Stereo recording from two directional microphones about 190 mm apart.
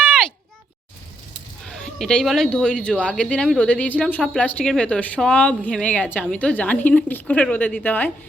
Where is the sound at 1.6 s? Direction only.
5° left (ahead or behind).